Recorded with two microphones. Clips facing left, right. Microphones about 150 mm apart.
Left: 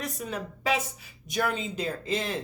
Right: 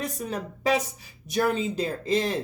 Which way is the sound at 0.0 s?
35° right (ahead or behind).